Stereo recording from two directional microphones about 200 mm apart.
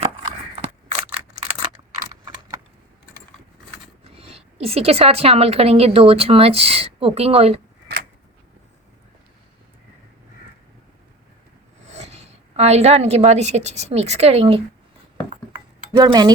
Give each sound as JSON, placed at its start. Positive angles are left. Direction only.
{"t": 2.0, "sound": "typing", "side_deg": -15}
{"t": 4.0, "sound": "a woman's voice", "side_deg": -30}
{"t": 11.9, "sound": "a woman's voice", "side_deg": -35}
{"t": 15.9, "sound": "a woman's voice", "side_deg": -20}